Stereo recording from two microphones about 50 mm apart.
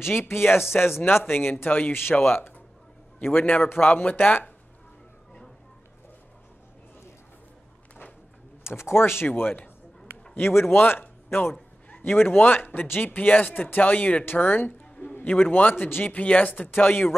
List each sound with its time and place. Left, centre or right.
0.0 s speech: left
8.6 s speech: left
9.3 s speech: left
10.3 s a man's voice: left